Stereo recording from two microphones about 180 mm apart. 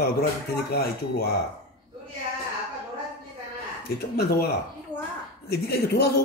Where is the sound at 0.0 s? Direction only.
60° left (ahead or behind).